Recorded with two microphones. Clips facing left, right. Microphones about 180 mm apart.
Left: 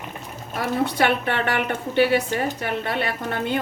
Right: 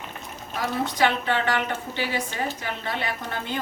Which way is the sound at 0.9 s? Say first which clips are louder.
Left 2 dB; 60° left (ahead or behind).